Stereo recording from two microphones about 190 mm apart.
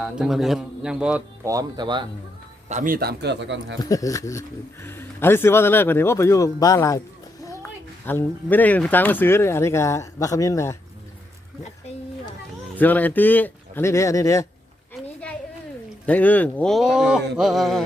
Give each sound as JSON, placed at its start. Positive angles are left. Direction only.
{"t": 0.0, "sound": "a man's voice", "side_deg": 0}
{"t": 1.5, "sound": "speech", "side_deg": -20}
{"t": 2.6, "sound": "a man's voice", "side_deg": -40}
{"t": 3.8, "sound": "speech", "side_deg": 15}
{"t": 8.0, "sound": "speech", "side_deg": 10}
{"t": 12.7, "sound": "speech", "side_deg": 10}
{"t": 16.0, "sound": "a man's voice", "side_deg": 10}